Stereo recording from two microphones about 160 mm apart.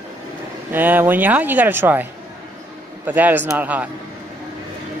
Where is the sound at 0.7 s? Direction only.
10° right (ahead or behind).